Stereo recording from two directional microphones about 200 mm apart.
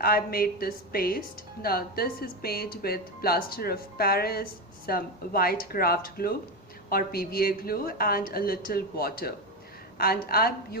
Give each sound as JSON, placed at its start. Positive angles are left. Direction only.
{"t": 0.0, "sound": "speech", "side_deg": 50}